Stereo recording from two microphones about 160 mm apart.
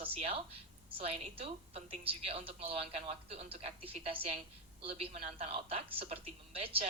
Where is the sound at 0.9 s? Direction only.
35° right (ahead or behind).